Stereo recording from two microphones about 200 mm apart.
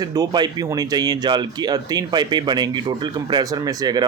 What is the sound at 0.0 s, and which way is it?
Speech, 20° right (ahead or behind).